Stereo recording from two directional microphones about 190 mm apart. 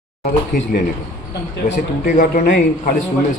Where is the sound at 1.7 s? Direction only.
40° left (ahead or behind).